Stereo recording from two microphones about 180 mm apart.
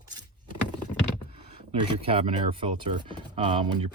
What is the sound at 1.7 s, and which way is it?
Speech, 30° right (ahead or behind).